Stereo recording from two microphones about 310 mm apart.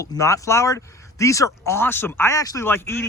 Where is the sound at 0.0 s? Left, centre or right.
Centre.